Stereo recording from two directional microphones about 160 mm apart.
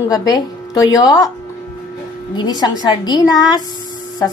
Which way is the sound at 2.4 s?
25° left (ahead or behind).